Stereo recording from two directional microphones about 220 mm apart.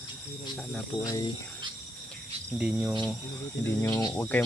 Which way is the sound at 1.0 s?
15° left (ahead or behind).